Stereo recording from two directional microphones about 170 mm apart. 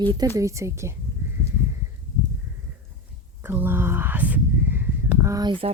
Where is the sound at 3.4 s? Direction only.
10° right (ahead or behind).